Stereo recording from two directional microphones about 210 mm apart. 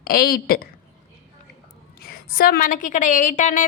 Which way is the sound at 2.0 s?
45° left (ahead or behind).